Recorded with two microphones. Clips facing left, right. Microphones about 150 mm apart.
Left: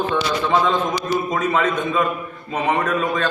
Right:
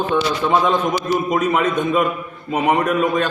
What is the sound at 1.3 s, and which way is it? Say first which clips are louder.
A man's voice: right 2 dB; 15° right (ahead or behind).